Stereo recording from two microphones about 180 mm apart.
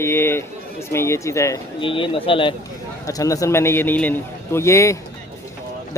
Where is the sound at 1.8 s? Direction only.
30° left (ahead or behind).